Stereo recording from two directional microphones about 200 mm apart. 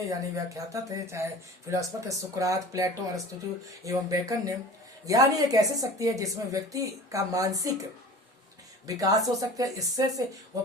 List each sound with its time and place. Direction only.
0.0 s a woman's voice: 15° right (ahead or behind)
8.9 s a woman's voice: 15° right (ahead or behind)